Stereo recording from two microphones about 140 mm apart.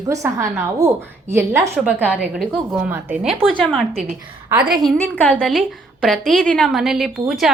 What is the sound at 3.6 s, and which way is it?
A woman's voice, 5° left (ahead or behind).